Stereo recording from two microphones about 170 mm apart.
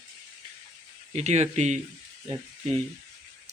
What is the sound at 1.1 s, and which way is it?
Speech, 40° right (ahead or behind).